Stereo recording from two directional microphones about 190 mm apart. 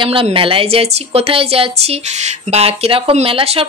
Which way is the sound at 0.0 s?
30° right (ahead or behind).